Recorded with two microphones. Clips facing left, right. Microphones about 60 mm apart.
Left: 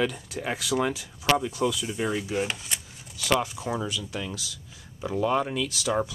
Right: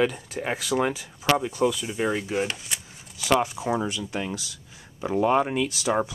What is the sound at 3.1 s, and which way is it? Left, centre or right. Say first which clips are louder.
Speech: right 3 dB; centre.